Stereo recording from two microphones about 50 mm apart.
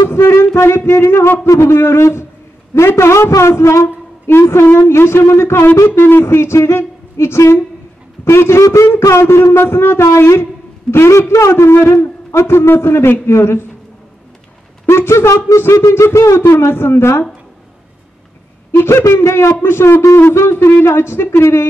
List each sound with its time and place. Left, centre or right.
0.6 s a woman's voice: left
4.6 s a woman's voice: left
12.3 s a man's voice: left
14.9 s a woman's voice: left
15.9 s speech: left
18.8 s speech: left